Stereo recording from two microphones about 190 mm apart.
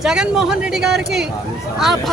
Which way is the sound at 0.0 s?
5° right (ahead or behind).